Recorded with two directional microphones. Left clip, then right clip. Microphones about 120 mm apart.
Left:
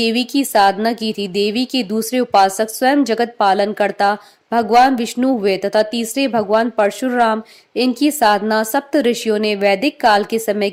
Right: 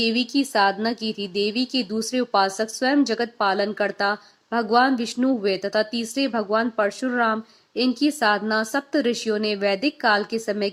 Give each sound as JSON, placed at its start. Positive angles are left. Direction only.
{"t": 0.0, "sound": "speech", "side_deg": 40}